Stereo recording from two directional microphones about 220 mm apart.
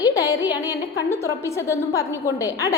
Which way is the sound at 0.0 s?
15° left (ahead or behind).